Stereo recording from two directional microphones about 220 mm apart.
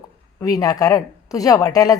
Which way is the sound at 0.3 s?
15° left (ahead or behind).